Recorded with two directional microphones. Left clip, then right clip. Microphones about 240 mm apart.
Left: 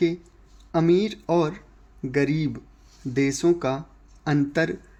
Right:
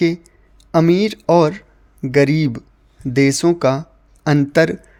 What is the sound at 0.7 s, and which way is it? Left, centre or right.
Speech, right.